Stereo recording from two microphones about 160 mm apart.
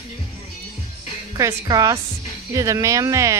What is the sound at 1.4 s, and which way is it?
Speech, 20° right (ahead or behind).